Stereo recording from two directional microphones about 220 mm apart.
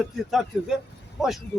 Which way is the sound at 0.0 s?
Centre (ahead or behind).